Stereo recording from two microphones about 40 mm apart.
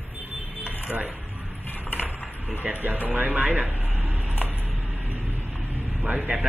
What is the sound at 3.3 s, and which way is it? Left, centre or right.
Speech, right.